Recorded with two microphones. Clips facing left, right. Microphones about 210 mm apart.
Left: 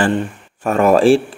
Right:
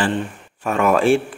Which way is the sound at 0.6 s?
35° left (ahead or behind).